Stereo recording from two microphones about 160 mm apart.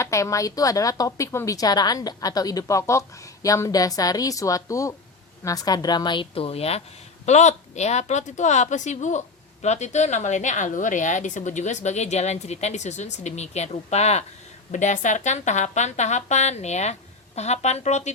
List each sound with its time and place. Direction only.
0.0 s a woman's voice: 20° left (ahead or behind); by 18.1 s 45° left (ahead or behind)